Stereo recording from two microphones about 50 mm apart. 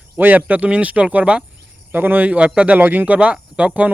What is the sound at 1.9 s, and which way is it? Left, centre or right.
Speech, right.